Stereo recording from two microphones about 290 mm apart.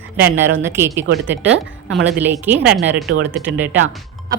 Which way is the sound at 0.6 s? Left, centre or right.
Centre.